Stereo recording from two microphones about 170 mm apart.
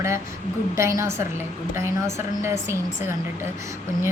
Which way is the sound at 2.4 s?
15° right (ahead or behind).